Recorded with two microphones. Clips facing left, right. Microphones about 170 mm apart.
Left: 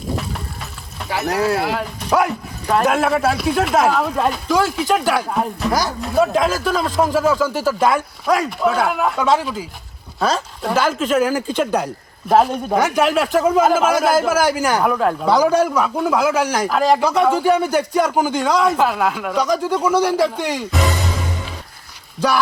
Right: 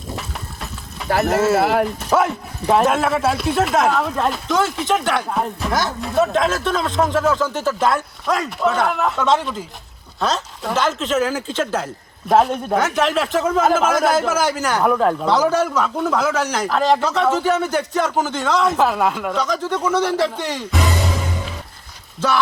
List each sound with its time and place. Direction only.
1.2 s speech: centre (ahead or behind)
1.5 s speech: 55° right (ahead or behind)
2.0 s speech: centre (ahead or behind)